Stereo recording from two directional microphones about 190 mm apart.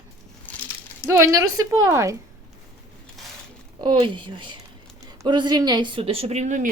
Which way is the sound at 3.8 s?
25° right (ahead or behind).